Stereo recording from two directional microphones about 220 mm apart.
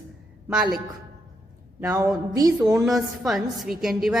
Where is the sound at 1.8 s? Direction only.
15° right (ahead or behind).